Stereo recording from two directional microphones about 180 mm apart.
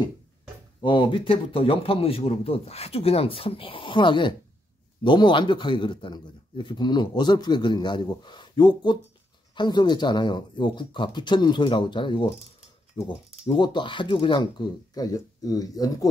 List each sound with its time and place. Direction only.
0.7 s a man's voice: 25° left (ahead or behind)